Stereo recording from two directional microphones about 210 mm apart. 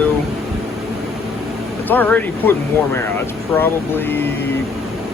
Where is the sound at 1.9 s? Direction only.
10° left (ahead or behind).